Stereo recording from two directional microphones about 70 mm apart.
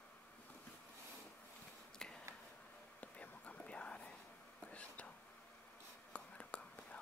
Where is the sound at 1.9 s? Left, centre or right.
Centre.